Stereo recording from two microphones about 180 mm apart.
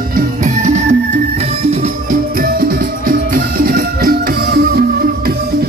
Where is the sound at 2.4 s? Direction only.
55° right (ahead or behind).